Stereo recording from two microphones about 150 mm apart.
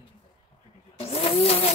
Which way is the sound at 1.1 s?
40° left (ahead or behind).